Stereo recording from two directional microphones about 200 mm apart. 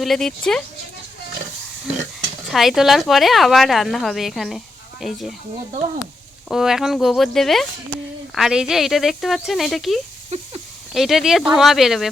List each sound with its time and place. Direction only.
0.0 s speech: centre (ahead or behind)
2.5 s speech: centre (ahead or behind)
6.5 s speech: centre (ahead or behind)
10.2 s a sound: 35° right (ahead or behind)
10.9 s speech: centre (ahead or behind)